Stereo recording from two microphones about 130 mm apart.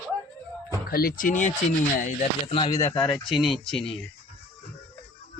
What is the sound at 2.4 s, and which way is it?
Speech, 40° left (ahead or behind).